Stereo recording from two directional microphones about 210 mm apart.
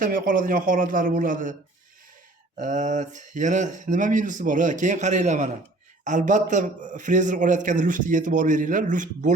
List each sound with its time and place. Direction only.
0.0 s a man's voice: 40° right (ahead or behind)
2.6 s a man's voice: 35° right (ahead or behind)